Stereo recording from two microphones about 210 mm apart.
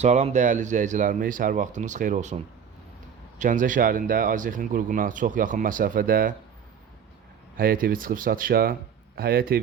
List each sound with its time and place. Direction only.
0.0 s speech: 35° right (ahead or behind)
7.5 s speech: 45° right (ahead or behind)